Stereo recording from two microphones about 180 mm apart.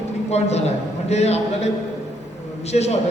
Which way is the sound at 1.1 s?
35° left (ahead or behind).